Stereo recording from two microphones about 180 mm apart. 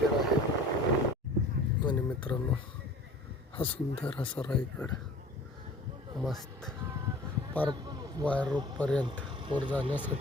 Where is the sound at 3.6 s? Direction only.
30° left (ahead or behind).